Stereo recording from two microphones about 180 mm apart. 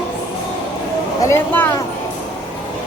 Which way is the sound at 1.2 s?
15° left (ahead or behind).